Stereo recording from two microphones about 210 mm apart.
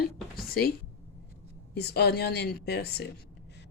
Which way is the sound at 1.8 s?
50° left (ahead or behind).